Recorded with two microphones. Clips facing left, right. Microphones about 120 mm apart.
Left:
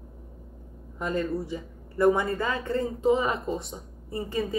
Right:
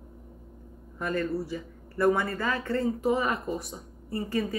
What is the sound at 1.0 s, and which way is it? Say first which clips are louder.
Speech: left 1 dB; 20° left (ahead or behind).